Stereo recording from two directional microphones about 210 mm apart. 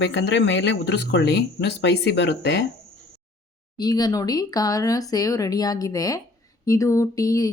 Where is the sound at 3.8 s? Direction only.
20° left (ahead or behind).